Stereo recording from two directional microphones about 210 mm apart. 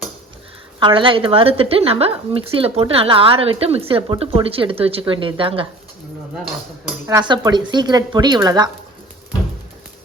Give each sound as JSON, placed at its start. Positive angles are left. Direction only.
{"t": 0.8, "sound": "a woman's voice", "side_deg": -25}
{"t": 7.1, "sound": "a woman's voice", "side_deg": -15}